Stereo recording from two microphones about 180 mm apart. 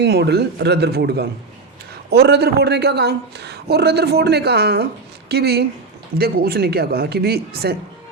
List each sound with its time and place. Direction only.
0.0 s speech: 70° right (ahead or behind)